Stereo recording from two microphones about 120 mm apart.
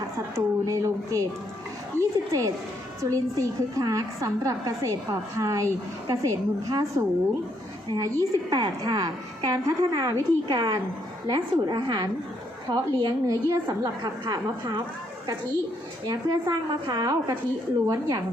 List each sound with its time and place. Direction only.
0.3 s a woman's voice: 25° right (ahead or behind)
16.0 s a woman's voice: 25° right (ahead or behind)